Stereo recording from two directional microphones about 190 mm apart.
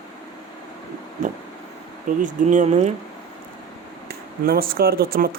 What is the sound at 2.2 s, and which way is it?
Speech, 40° right (ahead or behind).